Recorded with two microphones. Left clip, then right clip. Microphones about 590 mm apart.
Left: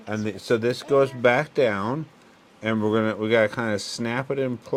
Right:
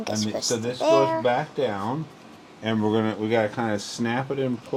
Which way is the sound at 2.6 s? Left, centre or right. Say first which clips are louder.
Left 1 dB; centre.